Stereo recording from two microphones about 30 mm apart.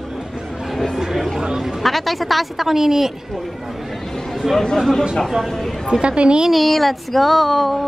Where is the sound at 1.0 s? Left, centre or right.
Centre.